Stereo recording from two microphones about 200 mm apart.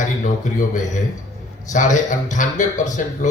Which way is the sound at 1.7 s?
40° left (ahead or behind).